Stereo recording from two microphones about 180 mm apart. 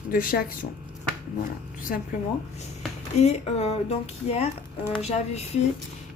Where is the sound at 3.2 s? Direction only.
35° left (ahead or behind).